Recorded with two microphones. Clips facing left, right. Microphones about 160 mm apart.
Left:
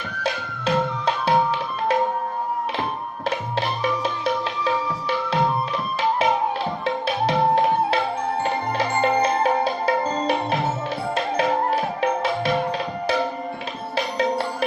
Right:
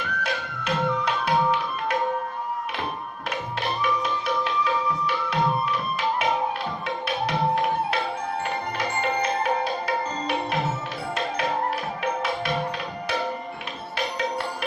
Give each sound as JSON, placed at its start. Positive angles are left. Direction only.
{"t": 0.2, "sound": "music", "side_deg": 30}
{"t": 7.3, "sound": "music", "side_deg": 30}
{"t": 13.9, "sound": "music", "side_deg": 30}